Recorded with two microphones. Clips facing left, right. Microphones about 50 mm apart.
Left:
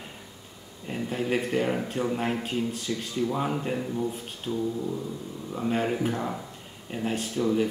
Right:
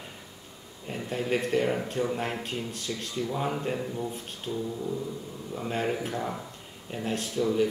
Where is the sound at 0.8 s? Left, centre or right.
Centre.